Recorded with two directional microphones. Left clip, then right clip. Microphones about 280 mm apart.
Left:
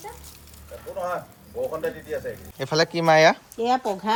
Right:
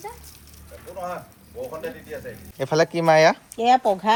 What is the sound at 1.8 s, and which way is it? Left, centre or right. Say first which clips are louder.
Speech: left 4 dB; left.